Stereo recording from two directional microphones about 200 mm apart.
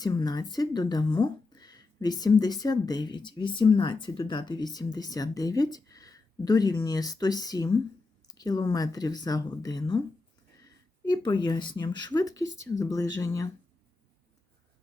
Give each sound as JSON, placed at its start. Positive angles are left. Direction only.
{"t": 0.0, "sound": "speech", "side_deg": 20}
{"t": 11.0, "sound": "speech", "side_deg": 20}